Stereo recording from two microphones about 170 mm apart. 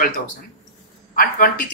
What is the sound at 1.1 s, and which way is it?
Speech, 50° left (ahead or behind).